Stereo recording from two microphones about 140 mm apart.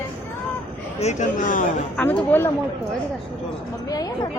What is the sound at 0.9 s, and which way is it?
Speech, 55° left (ahead or behind).